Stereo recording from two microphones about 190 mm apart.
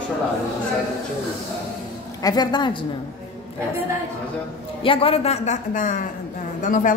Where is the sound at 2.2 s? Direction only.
20° left (ahead or behind).